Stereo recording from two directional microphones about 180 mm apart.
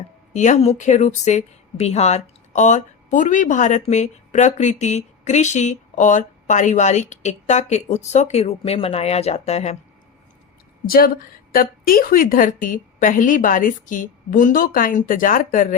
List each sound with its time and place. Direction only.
0.3 s a woman's voice: 40° left (ahead or behind)
10.8 s a woman's voice: 55° left (ahead or behind)